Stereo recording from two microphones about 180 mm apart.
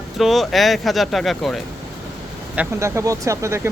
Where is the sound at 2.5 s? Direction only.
10° right (ahead or behind).